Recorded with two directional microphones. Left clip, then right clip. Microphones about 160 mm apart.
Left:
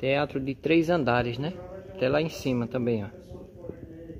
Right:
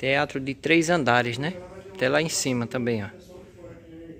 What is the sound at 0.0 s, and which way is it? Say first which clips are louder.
Speech: right 2 dB; centre (ahead or behind).